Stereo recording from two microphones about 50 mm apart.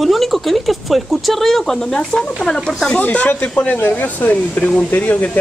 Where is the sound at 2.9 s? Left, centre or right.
Left.